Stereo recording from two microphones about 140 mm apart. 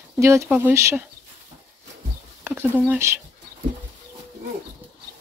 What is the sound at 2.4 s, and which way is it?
Speech, 10° right (ahead or behind).